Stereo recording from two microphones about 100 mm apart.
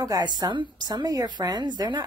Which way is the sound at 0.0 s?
45° right (ahead or behind).